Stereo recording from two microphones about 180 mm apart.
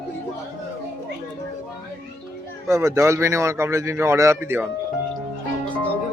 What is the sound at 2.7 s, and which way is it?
Speech, 15° right (ahead or behind).